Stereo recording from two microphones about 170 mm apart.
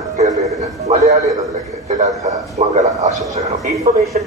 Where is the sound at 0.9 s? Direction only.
40° right (ahead or behind).